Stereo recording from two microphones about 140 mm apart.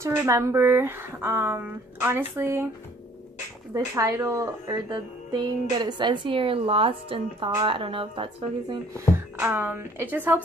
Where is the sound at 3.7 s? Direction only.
20° right (ahead or behind).